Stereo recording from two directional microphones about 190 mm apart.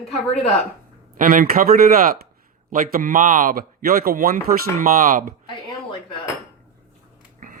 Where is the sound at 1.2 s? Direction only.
45° right (ahead or behind).